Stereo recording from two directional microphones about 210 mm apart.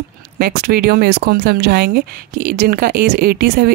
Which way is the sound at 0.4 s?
50° right (ahead or behind).